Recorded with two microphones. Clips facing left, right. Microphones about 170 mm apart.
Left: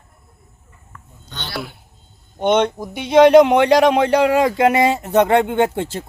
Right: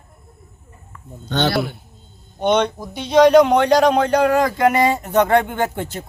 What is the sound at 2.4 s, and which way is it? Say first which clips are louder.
Speech: left 1 dB; 20° left (ahead or behind).